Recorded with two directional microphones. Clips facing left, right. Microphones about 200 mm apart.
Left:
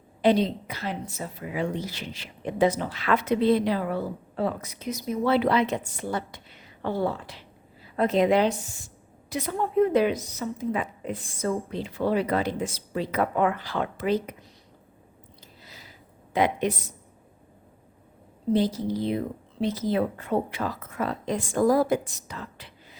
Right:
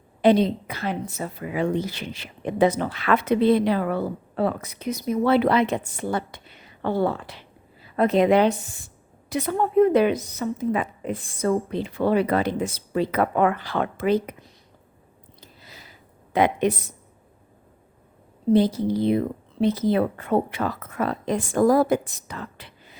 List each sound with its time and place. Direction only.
0.2 s a woman's voice: 55° right (ahead or behind)
16.3 s a woman's voice: 60° right (ahead or behind)
18.5 s a woman's voice: 60° right (ahead or behind)